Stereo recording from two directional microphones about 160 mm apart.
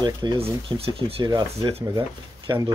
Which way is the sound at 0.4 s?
35° right (ahead or behind).